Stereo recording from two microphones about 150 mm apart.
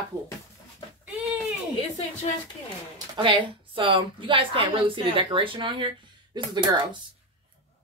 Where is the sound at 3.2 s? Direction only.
35° right (ahead or behind).